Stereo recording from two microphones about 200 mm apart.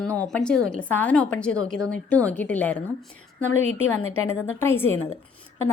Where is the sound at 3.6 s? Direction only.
75° left (ahead or behind).